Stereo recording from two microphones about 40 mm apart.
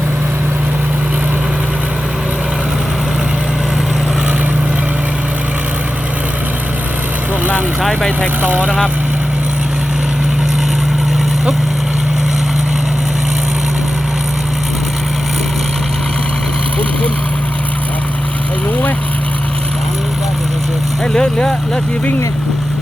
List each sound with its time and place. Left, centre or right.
8.4 s speech: right
21.1 s vehicle: centre